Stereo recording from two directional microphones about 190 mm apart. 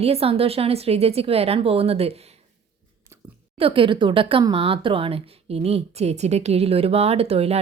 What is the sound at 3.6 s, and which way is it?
A woman's voice, 25° right (ahead or behind).